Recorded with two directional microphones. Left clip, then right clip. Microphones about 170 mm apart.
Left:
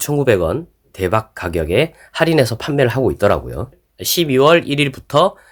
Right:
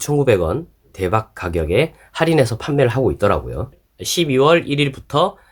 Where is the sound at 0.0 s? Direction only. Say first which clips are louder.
Left 1 dB; 20° left (ahead or behind).